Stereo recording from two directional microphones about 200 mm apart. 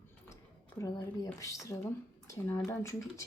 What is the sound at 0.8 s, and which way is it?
Speech, 15° left (ahead or behind).